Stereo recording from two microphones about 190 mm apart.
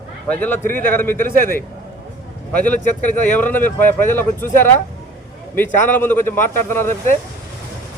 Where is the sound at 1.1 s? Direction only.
45° right (ahead or behind).